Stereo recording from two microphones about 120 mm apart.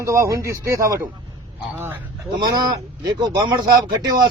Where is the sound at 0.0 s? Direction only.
25° right (ahead or behind).